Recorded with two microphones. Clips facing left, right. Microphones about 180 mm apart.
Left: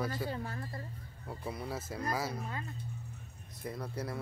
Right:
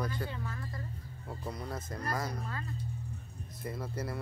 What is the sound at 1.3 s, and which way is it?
Speech, 5° left (ahead or behind).